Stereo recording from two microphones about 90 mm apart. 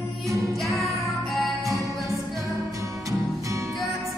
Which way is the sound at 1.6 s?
35° right (ahead or behind).